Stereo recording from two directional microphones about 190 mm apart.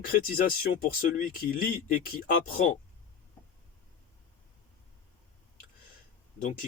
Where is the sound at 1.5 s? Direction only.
50° left (ahead or behind).